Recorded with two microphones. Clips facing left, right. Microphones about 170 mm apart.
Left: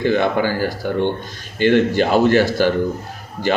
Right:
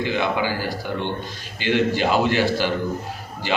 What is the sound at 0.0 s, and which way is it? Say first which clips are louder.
Speech: left 5 dB; 50° left (ahead or behind).